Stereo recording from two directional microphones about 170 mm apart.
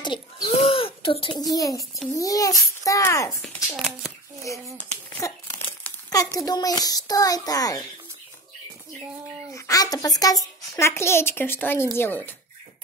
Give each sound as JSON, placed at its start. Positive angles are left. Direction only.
{"t": 0.0, "sound": "a sound", "side_deg": 25}
{"t": 0.6, "sound": "a child's voice", "side_deg": 35}
{"t": 5.2, "sound": "a child's voice", "side_deg": 15}
{"t": 9.5, "sound": "a child's voice", "side_deg": 20}